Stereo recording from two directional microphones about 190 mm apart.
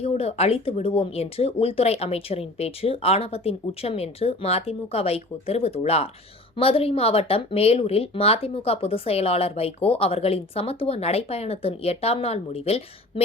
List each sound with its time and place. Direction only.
0.0 s speech: 30° left (ahead or behind)